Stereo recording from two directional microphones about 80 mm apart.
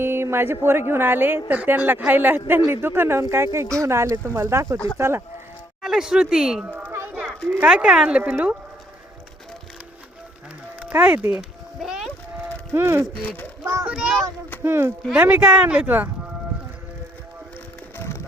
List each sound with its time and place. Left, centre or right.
0.0 s a woman's voice: right
5.8 s a woman's voice: centre
6.7 s children playing: right
7.6 s a woman's voice: centre
10.8 s speech: right
11.3 s a sound: centre
12.7 s speech: right
13.8 s a child's voice: centre
14.6 s speech: right
15.1 s a woman's voice: centre
17.9 s music: left